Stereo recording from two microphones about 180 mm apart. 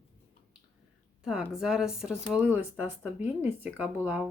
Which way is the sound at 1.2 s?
5° right (ahead or behind).